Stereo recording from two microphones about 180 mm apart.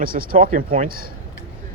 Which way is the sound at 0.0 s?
55° right (ahead or behind).